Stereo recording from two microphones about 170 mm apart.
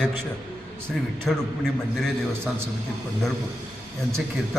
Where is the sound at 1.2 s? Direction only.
5° left (ahead or behind).